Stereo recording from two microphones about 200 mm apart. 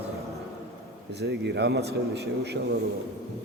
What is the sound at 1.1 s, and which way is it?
A man's voice, 55° right (ahead or behind).